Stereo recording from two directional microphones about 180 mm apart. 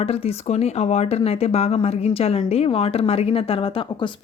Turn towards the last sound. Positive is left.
turn(degrees=30)  # may be behind; listen again after turning